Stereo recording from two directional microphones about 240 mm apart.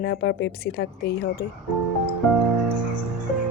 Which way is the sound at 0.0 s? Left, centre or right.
Left.